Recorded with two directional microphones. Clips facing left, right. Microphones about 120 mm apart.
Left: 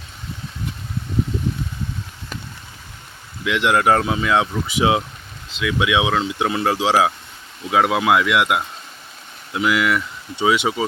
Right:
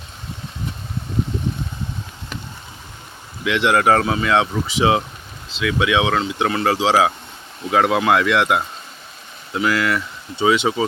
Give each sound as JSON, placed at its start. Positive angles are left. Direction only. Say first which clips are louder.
{"t": 3.4, "sound": "speech", "louder": "right 1 dB", "side_deg": 5}
{"t": 9.7, "sound": "speech", "louder": "left 1 dB", "side_deg": 15}